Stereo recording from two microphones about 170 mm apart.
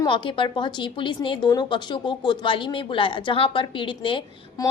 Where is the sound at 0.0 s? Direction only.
30° left (ahead or behind).